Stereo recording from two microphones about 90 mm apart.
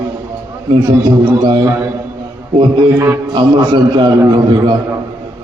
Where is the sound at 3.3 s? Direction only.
55° right (ahead or behind).